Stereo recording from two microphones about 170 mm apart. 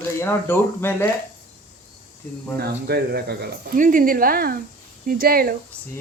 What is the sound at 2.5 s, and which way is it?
Speech, 65° right (ahead or behind).